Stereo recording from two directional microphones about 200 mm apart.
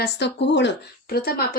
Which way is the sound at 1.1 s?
50° left (ahead or behind).